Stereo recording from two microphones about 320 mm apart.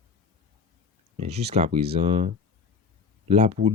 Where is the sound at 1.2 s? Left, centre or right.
Centre.